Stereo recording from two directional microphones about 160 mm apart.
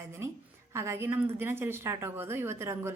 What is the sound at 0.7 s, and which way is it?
A woman's voice, 15° right (ahead or behind).